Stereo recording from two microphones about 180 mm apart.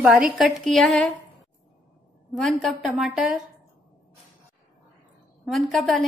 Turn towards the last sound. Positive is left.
turn(degrees=0)  # may be behind; listen again after turning